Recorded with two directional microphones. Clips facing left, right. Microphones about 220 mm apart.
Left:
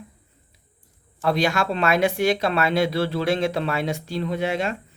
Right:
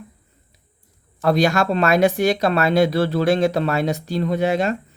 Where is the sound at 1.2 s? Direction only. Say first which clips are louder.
Right 4 dB; 40° right (ahead or behind).